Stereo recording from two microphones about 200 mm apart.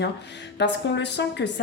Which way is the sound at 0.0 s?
60° left (ahead or behind).